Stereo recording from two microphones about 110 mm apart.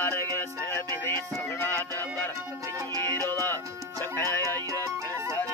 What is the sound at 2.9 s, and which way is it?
Music, 35° right (ahead or behind).